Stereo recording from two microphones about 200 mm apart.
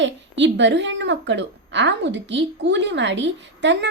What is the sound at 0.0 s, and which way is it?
A woman's voice, 65° right (ahead or behind).